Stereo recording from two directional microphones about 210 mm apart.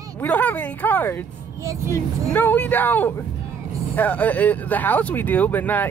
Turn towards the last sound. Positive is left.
turn(degrees=10)  # may be behind; listen again after turning